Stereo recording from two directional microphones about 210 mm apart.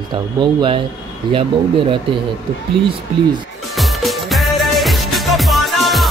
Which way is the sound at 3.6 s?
Centre (ahead or behind).